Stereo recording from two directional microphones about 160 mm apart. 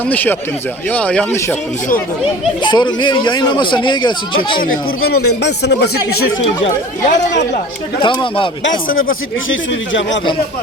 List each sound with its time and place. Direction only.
0.1 s speech: 10° left (ahead or behind)
2.6 s speech: 25° left (ahead or behind)
4.6 s speech: 75° left (ahead or behind)
7.0 s speech: 50° left (ahead or behind)
7.9 s speech: 30° left (ahead or behind)